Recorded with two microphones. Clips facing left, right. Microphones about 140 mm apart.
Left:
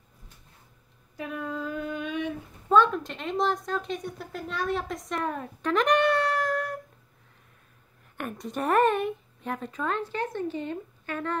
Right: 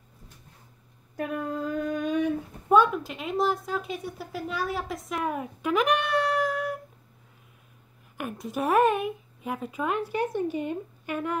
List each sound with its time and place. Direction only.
1.1 s female singing: 50° right (ahead or behind)
2.7 s speech: 10° right (ahead or behind)
8.2 s a woman's voice: 5° right (ahead or behind)